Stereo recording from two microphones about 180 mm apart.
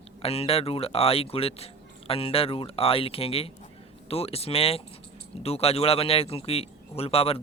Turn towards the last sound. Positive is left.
turn(degrees=35)  # may be behind; listen again after turning